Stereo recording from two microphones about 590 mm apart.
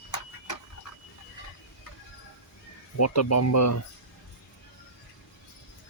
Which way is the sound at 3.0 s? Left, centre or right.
Left.